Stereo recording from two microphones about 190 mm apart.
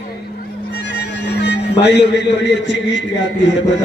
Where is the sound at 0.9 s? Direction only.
65° left (ahead or behind).